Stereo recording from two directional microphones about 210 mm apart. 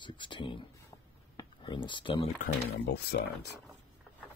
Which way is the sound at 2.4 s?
50° left (ahead or behind).